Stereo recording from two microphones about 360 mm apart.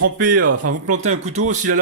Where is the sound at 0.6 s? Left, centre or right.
Right.